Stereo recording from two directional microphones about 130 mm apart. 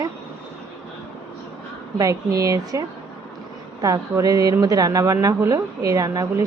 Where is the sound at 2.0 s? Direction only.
25° right (ahead or behind).